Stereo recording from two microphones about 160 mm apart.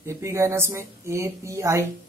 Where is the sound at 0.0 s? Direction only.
20° right (ahead or behind).